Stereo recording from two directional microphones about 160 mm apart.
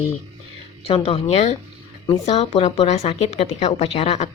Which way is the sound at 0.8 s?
40° left (ahead or behind).